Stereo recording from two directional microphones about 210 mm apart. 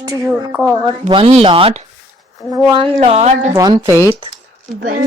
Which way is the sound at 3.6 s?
15° right (ahead or behind).